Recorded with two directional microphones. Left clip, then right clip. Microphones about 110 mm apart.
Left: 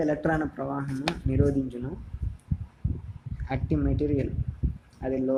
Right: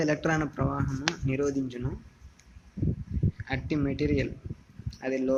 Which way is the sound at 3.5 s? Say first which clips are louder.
Left 2 dB; centre (ahead or behind).